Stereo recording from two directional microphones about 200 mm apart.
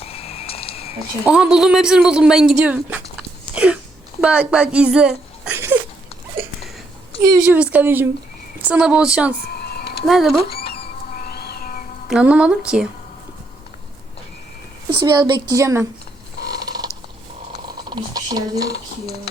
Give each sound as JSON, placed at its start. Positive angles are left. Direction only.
{"t": 0.0, "sound": "a sound", "side_deg": 30}
{"t": 1.2, "sound": "speech", "side_deg": -5}
{"t": 3.5, "sound": "a sound", "side_deg": -5}
{"t": 4.2, "sound": "speech", "side_deg": -5}
{"t": 7.4, "sound": "a woman's voice", "side_deg": -5}
{"t": 9.6, "sound": "a sound", "side_deg": 55}
{"t": 10.1, "sound": "speech", "side_deg": 0}
{"t": 10.5, "sound": "a sound", "side_deg": 50}
{"t": 12.0, "sound": "speech", "side_deg": -5}
{"t": 15.0, "sound": "a woman's voice", "side_deg": -20}
{"t": 16.6, "sound": "mechanisms", "side_deg": -20}
{"t": 17.8, "sound": "speech", "side_deg": -20}